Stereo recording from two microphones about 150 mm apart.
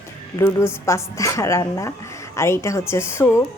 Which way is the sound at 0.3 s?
15° left (ahead or behind).